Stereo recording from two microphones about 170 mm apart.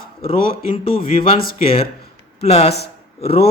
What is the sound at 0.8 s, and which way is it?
Speech, 30° left (ahead or behind).